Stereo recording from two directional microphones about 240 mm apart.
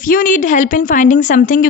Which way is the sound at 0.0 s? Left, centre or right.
Left.